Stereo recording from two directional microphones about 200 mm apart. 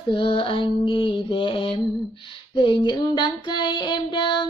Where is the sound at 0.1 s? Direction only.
25° left (ahead or behind).